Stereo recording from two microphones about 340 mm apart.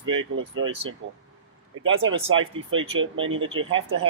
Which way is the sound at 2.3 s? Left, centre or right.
Right.